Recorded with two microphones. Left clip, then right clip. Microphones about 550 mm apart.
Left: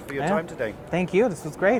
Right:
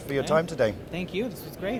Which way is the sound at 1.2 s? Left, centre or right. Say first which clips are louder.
Left 13 dB; left.